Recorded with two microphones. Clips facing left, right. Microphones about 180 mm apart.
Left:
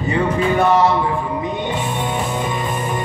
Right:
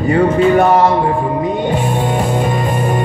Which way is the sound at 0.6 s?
50° right (ahead or behind).